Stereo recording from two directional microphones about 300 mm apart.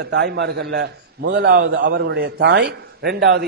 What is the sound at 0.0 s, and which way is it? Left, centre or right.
A man's voice, right.